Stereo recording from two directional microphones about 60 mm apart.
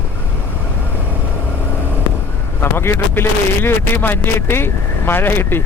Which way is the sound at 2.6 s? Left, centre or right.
Left.